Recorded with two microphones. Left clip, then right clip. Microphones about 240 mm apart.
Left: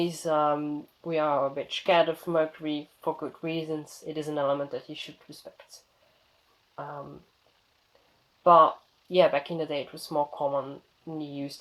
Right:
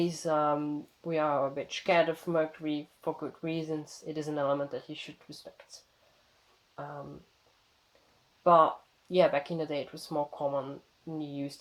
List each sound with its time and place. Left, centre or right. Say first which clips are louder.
0.0 s speech: left 3 dB; centre
6.7 s a sound: left 3 dB; left
8.4 s speech: left 4 dB; centre